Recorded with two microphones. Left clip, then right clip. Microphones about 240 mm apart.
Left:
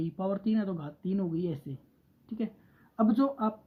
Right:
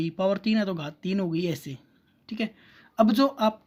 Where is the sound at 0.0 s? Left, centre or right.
Right.